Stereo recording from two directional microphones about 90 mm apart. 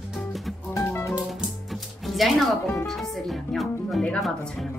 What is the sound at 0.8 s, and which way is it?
Music, 30° left (ahead or behind).